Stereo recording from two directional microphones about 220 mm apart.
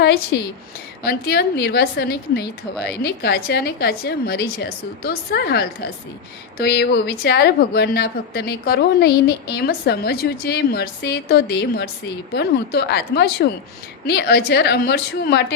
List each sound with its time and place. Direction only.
0.3 s a woman's voice: 50° left (ahead or behind)